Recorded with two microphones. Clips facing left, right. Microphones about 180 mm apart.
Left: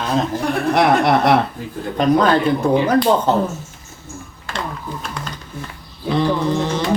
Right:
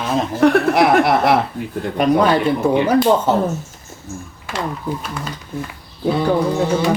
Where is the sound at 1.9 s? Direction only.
10° right (ahead or behind).